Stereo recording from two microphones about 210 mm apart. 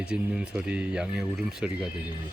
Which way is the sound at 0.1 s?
5° right (ahead or behind).